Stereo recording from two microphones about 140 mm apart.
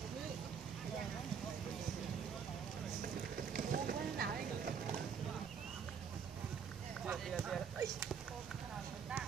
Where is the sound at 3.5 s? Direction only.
90° right.